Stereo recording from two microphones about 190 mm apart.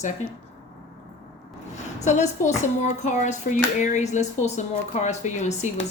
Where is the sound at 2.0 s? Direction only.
40° left (ahead or behind).